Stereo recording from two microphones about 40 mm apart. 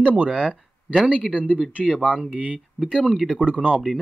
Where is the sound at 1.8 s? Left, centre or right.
Centre.